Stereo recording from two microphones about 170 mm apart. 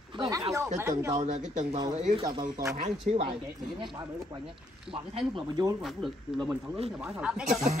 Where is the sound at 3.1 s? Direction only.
45° right (ahead or behind).